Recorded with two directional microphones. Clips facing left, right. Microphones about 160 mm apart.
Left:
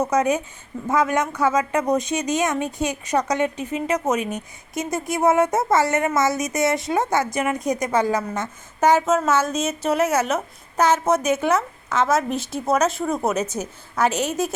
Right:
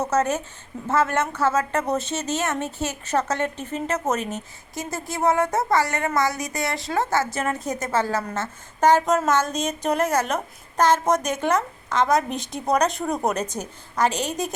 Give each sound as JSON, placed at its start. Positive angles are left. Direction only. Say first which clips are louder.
{"t": 0.0, "sound": "a woman's voice", "louder": "left 2 dB", "side_deg": 10}